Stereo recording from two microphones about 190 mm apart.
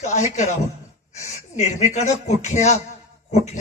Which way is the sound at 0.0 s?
40° left (ahead or behind).